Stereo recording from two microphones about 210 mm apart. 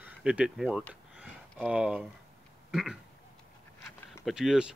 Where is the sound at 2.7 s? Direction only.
Centre (ahead or behind).